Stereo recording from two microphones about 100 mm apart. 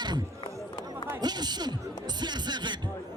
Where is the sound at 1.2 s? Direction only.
45° right (ahead or behind).